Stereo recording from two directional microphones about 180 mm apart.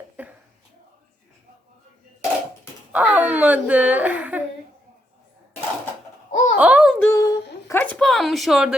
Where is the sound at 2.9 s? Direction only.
10° right (ahead or behind).